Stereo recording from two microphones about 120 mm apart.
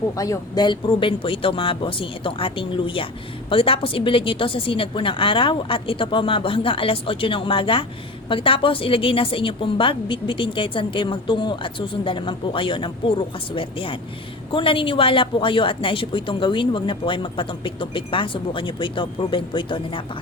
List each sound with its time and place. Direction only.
0.2 s a woman's voice: 30° left (ahead or behind)